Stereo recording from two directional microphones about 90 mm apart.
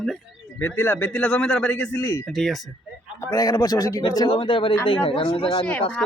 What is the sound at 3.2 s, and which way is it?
A man's voice, 40° left (ahead or behind).